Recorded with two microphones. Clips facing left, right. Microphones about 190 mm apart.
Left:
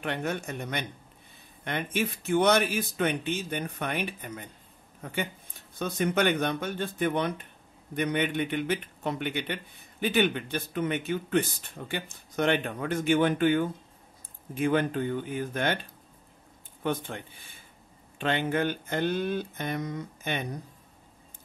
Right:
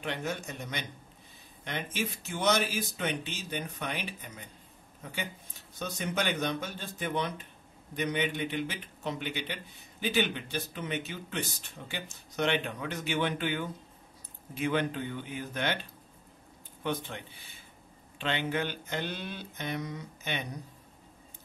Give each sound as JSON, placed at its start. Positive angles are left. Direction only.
{"t": 0.0, "sound": "a man's voice", "side_deg": 55}